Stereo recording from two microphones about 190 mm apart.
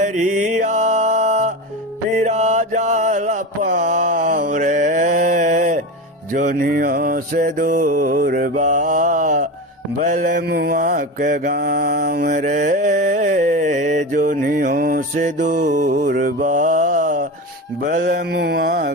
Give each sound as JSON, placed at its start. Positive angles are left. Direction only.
{"t": 0.0, "sound": "music", "side_deg": -40}
{"t": 2.1, "sound": "mantra", "side_deg": -35}